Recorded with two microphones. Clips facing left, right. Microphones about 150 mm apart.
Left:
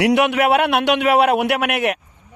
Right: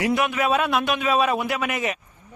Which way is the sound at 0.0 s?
75° left (ahead or behind).